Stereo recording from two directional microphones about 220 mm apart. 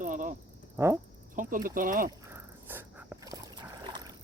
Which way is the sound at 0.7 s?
10° right (ahead or behind).